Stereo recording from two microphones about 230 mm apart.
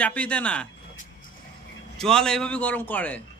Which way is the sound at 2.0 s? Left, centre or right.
Centre.